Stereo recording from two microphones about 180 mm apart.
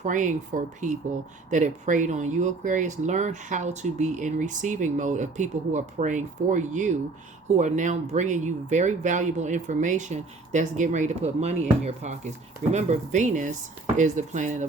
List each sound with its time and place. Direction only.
0.0 s speech: 45° right (ahead or behind)